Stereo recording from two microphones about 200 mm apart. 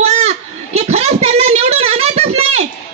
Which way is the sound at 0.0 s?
35° right (ahead or behind).